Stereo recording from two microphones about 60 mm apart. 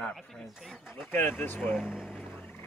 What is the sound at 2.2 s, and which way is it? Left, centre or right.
Turkey, left.